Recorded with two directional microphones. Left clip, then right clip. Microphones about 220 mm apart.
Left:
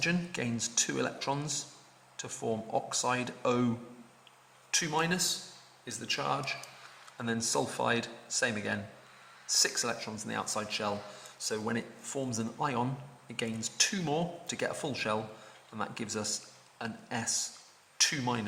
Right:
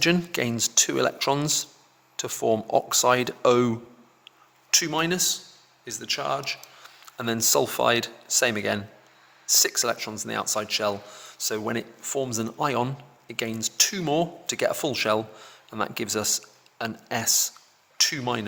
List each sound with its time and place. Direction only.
0.0 s speech: 45° right (ahead or behind)